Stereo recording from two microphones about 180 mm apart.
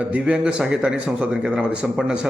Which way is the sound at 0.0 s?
5° right (ahead or behind).